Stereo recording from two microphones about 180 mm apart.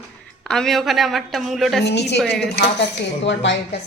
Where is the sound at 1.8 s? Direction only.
70° left (ahead or behind).